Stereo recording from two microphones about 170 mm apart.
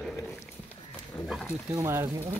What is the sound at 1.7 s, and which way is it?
Speech, 15° right (ahead or behind).